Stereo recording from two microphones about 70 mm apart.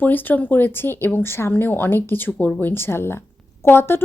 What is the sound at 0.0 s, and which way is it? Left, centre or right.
A woman's voice, left.